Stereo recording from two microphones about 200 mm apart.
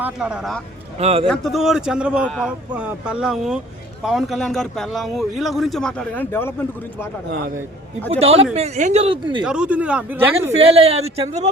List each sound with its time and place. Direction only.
0.0 s speech: 5° right (ahead or behind)
0.9 s speech: 30° right (ahead or behind)
1.3 s speech: centre (ahead or behind)
8.2 s speech: 30° right (ahead or behind)
9.4 s speech: 5° right (ahead or behind)
10.6 s a man's voice: 30° right (ahead or behind)